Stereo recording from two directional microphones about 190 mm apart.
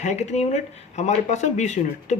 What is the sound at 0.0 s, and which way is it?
Speech, 35° left (ahead or behind).